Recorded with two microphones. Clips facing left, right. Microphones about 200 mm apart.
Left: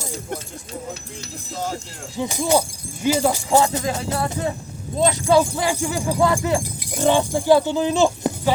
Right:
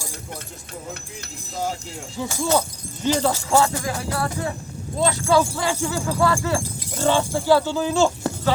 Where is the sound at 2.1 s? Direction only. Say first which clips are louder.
Left 2 dB; 15° left (ahead or behind).